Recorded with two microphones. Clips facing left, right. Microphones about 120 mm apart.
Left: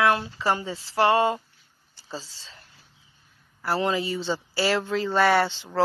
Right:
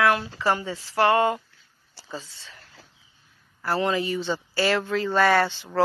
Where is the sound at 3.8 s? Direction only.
25° left (ahead or behind).